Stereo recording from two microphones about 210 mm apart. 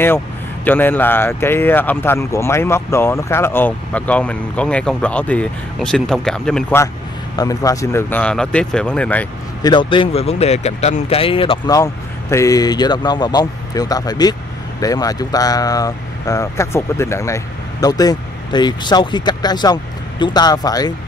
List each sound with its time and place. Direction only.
0.7 s speech: 10° left (ahead or behind)
9.6 s speech: 20° left (ahead or behind)